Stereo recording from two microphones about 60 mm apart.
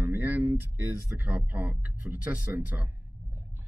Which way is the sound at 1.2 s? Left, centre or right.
Right.